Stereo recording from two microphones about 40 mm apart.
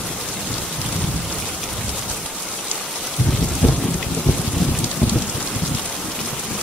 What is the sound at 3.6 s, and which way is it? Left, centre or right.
Rain, right.